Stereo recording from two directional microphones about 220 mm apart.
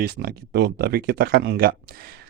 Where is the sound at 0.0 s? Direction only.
45° right (ahead or behind).